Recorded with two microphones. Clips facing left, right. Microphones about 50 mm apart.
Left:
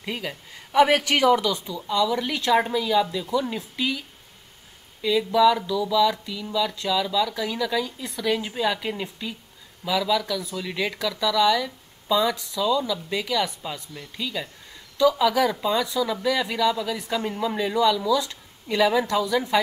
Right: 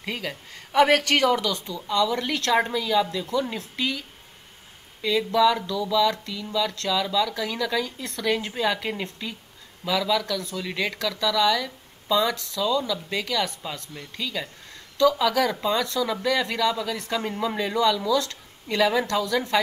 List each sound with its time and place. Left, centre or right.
0.0 s speech: centre
5.0 s speech: centre
12.4 s speech: centre
12.6 s speech: centre
17.2 s a woman's voice: centre